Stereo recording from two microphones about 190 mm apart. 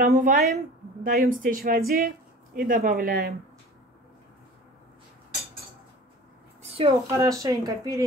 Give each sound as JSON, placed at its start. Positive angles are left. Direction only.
{"t": 0.0, "sound": "speech", "side_deg": -45}
{"t": 6.6, "sound": "a sound", "side_deg": -30}
{"t": 7.2, "sound": "speech", "side_deg": -15}